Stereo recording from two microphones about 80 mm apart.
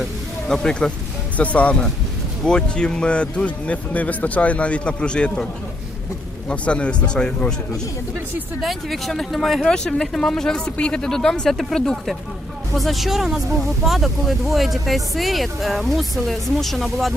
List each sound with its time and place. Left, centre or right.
0.0 s a sound: centre
1.4 s speech: centre
6.5 s speech: centre
8.6 s speech: centre